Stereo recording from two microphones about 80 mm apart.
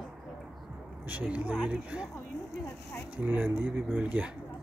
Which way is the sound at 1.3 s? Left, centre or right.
Centre.